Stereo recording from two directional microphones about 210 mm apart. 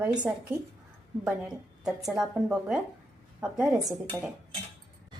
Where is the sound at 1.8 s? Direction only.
5° right (ahead or behind).